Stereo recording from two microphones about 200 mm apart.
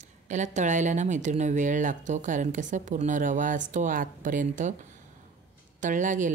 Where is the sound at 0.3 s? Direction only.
35° right (ahead or behind).